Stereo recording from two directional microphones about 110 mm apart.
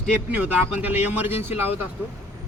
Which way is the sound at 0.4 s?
15° right (ahead or behind).